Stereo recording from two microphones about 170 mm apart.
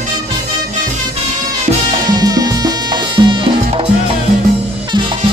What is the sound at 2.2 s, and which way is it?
Music, 25° right (ahead or behind).